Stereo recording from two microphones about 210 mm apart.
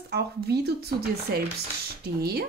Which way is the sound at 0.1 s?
50° right (ahead or behind).